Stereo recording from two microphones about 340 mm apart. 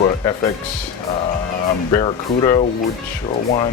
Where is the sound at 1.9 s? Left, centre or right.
Centre.